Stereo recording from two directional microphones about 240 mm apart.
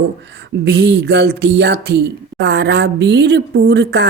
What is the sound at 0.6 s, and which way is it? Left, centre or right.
Speech, right.